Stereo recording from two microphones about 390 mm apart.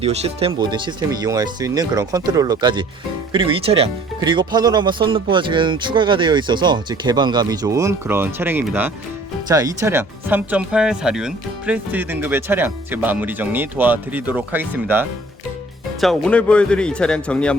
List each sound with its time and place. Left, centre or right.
0.0 s speech: centre